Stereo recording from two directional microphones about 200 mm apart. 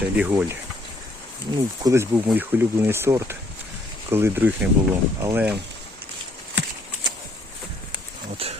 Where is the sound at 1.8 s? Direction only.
15° right (ahead or behind).